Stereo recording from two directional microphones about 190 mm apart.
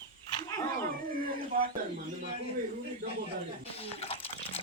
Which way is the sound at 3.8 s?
30° left (ahead or behind).